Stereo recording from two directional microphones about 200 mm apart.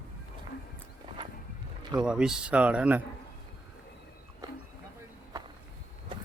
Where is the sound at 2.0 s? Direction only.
5° right (ahead or behind).